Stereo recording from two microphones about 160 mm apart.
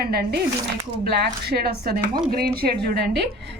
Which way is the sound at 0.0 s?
80° right.